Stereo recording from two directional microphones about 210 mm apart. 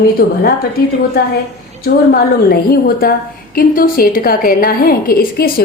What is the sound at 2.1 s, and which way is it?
A woman's voice, 45° left (ahead or behind).